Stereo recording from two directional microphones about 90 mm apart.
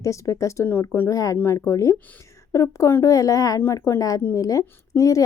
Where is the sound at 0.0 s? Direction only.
35° left (ahead or behind).